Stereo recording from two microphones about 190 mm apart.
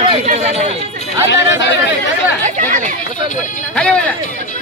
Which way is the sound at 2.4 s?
40° right (ahead or behind).